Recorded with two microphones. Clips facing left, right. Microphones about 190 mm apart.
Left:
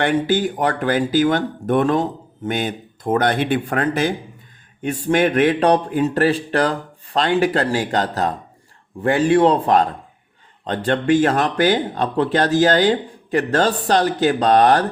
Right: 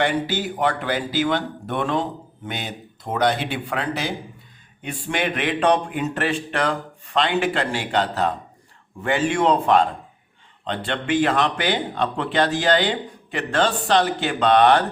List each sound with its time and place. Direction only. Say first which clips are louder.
0.0 s speech: left 5 dB; 50° left (ahead or behind)